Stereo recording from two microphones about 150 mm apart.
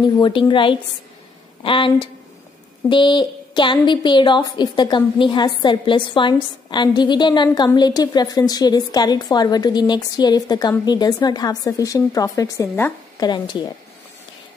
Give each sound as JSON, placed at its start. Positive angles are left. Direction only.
{"t": 0.0, "sound": "a woman's voice", "side_deg": 35}
{"t": 13.2, "sound": "a woman's voice", "side_deg": 30}